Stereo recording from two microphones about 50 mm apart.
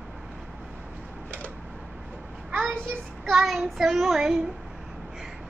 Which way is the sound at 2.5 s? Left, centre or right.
Right.